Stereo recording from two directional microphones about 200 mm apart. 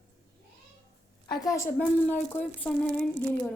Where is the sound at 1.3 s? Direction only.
20° left (ahead or behind).